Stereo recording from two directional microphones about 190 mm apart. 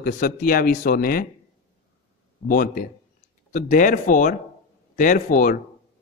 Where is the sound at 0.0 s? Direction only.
50° left (ahead or behind).